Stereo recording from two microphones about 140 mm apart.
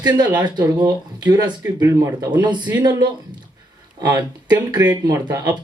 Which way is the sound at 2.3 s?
30° right (ahead or behind).